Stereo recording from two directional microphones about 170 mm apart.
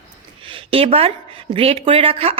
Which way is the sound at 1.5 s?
35° right (ahead or behind).